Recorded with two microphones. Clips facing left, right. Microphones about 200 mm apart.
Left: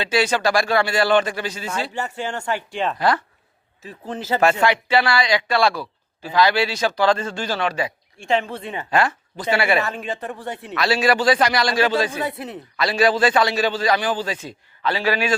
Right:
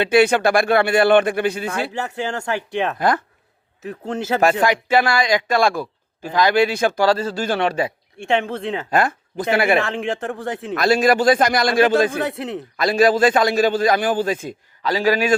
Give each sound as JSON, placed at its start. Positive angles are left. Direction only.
{"t": 0.0, "sound": "speech", "side_deg": -55}
{"t": 3.8, "sound": "speech", "side_deg": -75}
{"t": 4.4, "sound": "a man's voice", "side_deg": -45}
{"t": 8.2, "sound": "speech", "side_deg": -60}
{"t": 8.6, "sound": "speech", "side_deg": -90}
{"t": 8.9, "sound": "a man's voice", "side_deg": -45}
{"t": 9.8, "sound": "a man's voice", "side_deg": -80}
{"t": 10.7, "sound": "a man's voice", "side_deg": -50}
{"t": 12.7, "sound": "a man's voice", "side_deg": -45}
{"t": 14.8, "sound": "a man's voice", "side_deg": -40}